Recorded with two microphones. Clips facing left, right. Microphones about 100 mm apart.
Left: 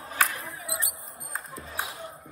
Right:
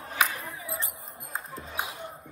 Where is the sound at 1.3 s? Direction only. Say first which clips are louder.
Right 1 dB; centre (ahead or behind).